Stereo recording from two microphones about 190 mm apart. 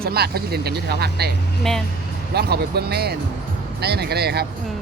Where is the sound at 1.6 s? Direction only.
Centre (ahead or behind).